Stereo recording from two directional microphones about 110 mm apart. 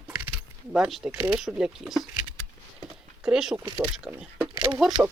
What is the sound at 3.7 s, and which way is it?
Speech, 35° right (ahead or behind).